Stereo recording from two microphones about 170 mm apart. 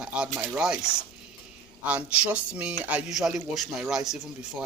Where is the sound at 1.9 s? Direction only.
5° right (ahead or behind).